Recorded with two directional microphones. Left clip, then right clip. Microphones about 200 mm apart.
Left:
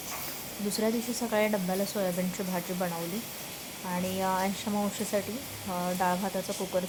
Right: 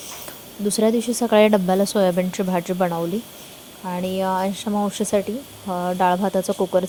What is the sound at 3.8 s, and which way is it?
Speech, 30° right (ahead or behind).